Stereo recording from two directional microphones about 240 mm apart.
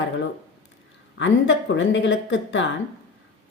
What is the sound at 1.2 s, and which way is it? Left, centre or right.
A woman's voice, left.